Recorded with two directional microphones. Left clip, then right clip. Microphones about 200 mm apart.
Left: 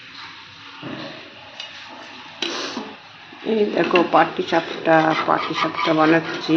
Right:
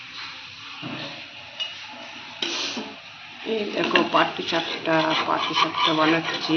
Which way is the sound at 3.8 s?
40° left (ahead or behind).